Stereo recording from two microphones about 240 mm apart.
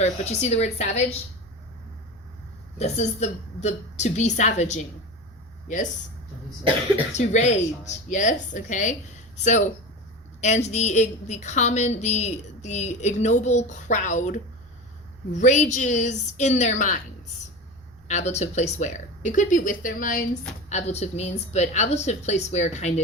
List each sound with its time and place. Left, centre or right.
0.0 s a woman's voice: left
2.7 s a woman's voice: left
7.1 s a woman's voice: left
18.1 s a woman's voice: left